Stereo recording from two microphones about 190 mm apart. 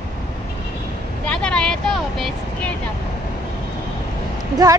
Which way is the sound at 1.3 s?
5° left (ahead or behind).